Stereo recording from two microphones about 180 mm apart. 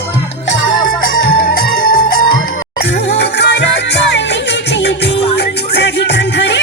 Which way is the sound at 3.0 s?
70° left (ahead or behind).